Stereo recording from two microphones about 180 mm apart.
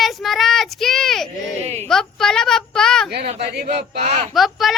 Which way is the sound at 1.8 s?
5° left (ahead or behind).